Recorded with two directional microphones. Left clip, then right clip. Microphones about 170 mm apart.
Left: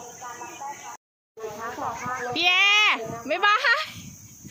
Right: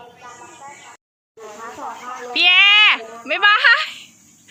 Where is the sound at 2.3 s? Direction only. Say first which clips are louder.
Right 8 dB; 5° left (ahead or behind).